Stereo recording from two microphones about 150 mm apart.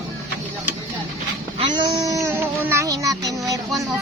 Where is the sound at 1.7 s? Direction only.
25° right (ahead or behind).